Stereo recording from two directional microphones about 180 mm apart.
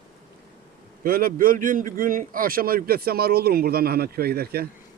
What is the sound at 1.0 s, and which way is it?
A man's voice, 55° right (ahead or behind).